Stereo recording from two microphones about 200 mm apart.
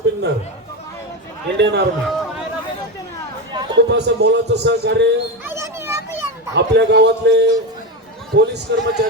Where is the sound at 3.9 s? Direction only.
60° right (ahead or behind).